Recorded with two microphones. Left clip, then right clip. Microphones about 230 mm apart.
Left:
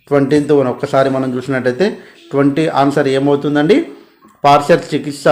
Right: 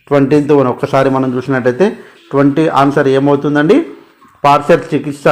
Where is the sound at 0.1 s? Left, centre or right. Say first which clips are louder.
Right 2 dB; centre.